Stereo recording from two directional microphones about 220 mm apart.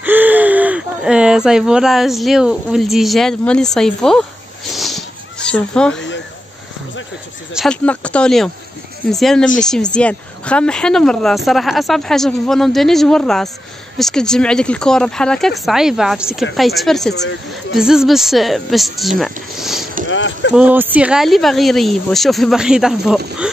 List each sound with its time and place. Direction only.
0.0 s speech: 10° right (ahead or behind)
4.7 s a sound: centre (ahead or behind)
7.5 s speech: 5° left (ahead or behind)
17.1 s speech: 50° left (ahead or behind)
17.7 s speech: centre (ahead or behind)
20.1 s speech: 55° left (ahead or behind)
20.5 s speech: 10° right (ahead or behind)